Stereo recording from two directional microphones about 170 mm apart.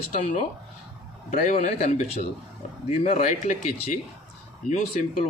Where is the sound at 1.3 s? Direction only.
45° left (ahead or behind).